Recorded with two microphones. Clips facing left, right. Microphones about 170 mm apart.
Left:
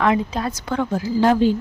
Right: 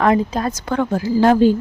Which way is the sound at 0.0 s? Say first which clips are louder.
Right 3 dB; 45° right (ahead or behind).